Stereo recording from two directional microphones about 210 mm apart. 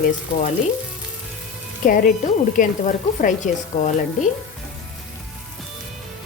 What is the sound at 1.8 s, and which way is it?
Speech, 40° left (ahead or behind).